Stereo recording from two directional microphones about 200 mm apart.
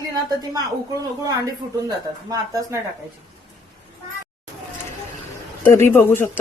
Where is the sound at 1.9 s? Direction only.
15° right (ahead or behind).